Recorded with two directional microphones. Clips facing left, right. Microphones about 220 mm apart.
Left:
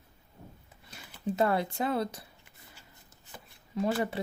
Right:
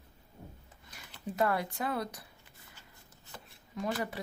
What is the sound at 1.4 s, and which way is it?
Speech, 25° left (ahead or behind).